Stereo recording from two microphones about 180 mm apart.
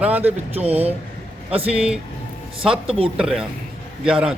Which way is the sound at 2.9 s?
30° right (ahead or behind).